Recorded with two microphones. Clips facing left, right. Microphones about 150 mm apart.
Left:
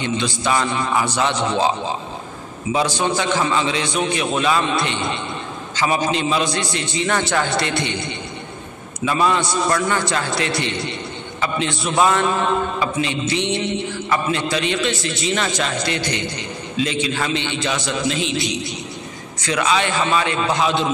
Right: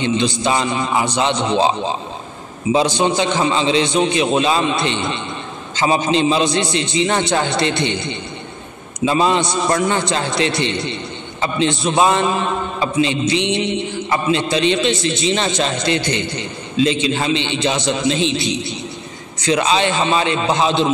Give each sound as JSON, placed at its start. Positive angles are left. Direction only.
{"t": 0.0, "sound": "a man's voice", "side_deg": -25}
{"t": 2.7, "sound": "a man's voice", "side_deg": -20}